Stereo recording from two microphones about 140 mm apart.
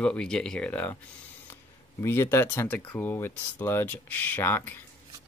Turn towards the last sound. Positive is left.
turn(degrees=15)  # may be behind; listen again after turning